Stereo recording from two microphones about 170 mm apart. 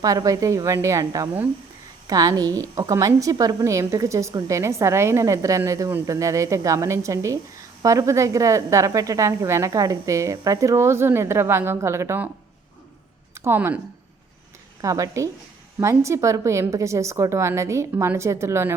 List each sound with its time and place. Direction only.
0.0 s a woman's voice: 20° right (ahead or behind)
13.3 s speech: 15° right (ahead or behind)
14.8 s a woman's voice: 20° right (ahead or behind)